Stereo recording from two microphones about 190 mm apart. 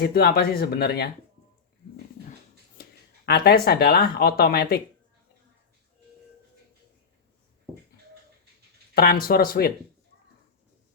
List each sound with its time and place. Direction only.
0.0 s speech: 55° left (ahead or behind)
3.2 s speech: 55° left (ahead or behind)
9.0 s speech: 55° left (ahead or behind)